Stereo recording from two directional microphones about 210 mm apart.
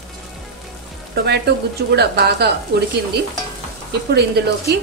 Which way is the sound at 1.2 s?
50° right (ahead or behind).